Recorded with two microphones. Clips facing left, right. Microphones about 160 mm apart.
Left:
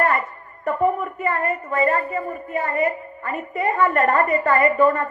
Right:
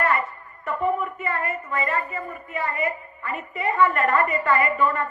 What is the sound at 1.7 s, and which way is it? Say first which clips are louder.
A woman's voice: left 7 dB; 35° left (ahead or behind).